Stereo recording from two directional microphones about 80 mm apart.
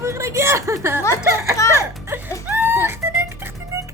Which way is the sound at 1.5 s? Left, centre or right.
Left.